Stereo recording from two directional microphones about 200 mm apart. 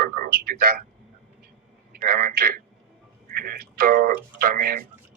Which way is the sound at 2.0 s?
50° right (ahead or behind).